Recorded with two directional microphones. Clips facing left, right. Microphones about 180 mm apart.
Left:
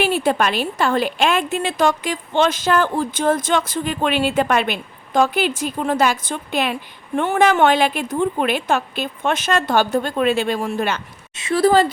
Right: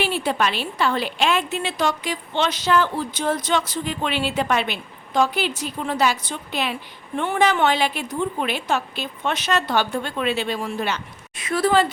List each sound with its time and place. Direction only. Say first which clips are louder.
0.0 s a woman's voice: left 4 dB; 50° left (ahead or behind)
11.3 s speech: left 4 dB; 30° left (ahead or behind)